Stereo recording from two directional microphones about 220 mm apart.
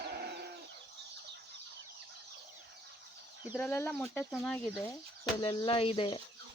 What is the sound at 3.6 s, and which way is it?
Speech, 10° left (ahead or behind).